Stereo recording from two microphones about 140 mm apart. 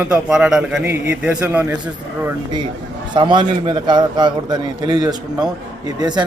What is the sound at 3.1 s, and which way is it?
A man's voice, 35° right (ahead or behind).